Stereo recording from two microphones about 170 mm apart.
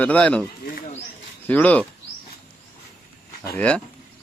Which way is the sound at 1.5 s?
10° left (ahead or behind).